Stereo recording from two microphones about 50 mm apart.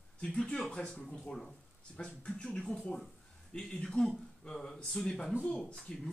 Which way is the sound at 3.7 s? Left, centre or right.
Centre.